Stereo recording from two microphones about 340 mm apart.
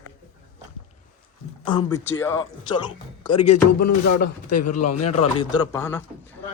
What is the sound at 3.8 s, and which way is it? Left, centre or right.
Speech, left.